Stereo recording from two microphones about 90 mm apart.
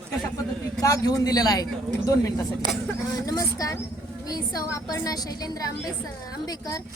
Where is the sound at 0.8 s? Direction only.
40° left (ahead or behind).